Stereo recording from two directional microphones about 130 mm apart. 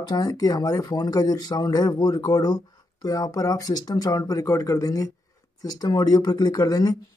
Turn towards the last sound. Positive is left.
turn(degrees=30)  # may be behind; listen again after turning